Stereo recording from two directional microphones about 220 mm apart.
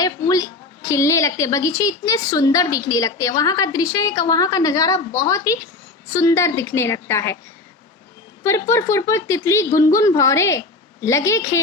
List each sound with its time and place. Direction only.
0.0 s a woman's voice: 15° left (ahead or behind)
8.4 s a woman's voice: 10° left (ahead or behind)